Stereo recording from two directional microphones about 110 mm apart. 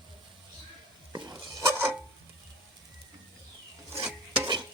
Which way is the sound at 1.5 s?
25° right (ahead or behind).